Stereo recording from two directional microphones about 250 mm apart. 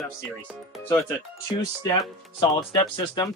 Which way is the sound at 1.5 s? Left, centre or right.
Centre.